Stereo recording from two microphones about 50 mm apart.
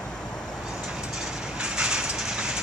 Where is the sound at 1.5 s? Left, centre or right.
Centre.